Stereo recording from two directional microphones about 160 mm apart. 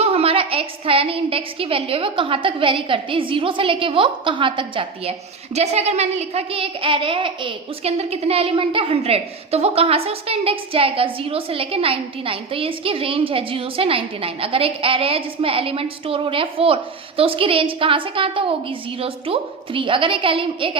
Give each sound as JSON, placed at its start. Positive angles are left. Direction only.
{"t": 0.0, "sound": "a woman's voice", "side_deg": -40}